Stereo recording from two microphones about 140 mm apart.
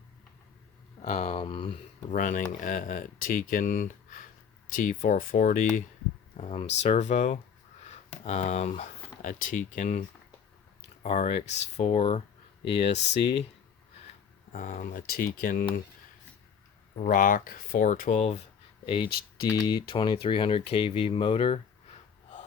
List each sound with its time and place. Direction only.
1.0 s speech: 50° left (ahead or behind)
1.4 s speech: 35° left (ahead or behind)
2.0 s speech: 65° left (ahead or behind); by 5.6 s 80° left
6.3 s speech: 45° left (ahead or behind); by 10.0 s 60° left (ahead or behind)
11.0 s speech: 50° left (ahead or behind)
14.5 s speech: 65° left (ahead or behind); by 15.6 s 85° left
17.0 s speech: 75° left (ahead or behind)
18.2 s speech: 50° left (ahead or behind)
18.9 s speech: 35° left (ahead or behind)